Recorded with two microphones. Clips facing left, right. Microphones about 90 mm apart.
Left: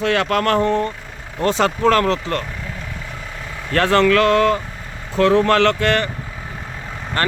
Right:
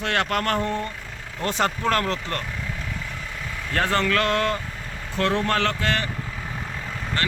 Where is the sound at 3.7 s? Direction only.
90° left.